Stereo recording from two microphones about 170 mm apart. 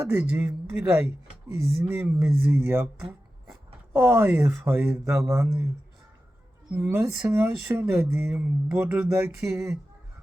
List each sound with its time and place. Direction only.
0.0 s speech: 15° right (ahead or behind)
3.9 s speech: 10° right (ahead or behind)
6.7 s speech: 15° right (ahead or behind)